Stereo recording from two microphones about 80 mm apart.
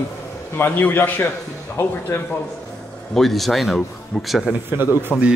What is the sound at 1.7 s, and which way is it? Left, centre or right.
Speech, left.